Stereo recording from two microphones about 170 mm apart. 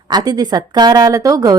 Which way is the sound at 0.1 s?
25° right (ahead or behind).